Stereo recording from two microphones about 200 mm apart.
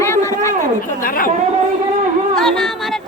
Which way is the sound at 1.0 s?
45° left (ahead or behind).